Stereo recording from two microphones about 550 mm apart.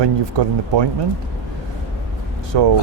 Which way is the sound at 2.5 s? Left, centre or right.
Right.